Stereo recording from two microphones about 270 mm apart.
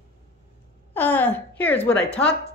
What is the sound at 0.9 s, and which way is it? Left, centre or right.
A woman's voice, centre.